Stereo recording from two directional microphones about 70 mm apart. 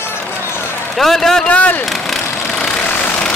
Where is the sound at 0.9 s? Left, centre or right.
Centre.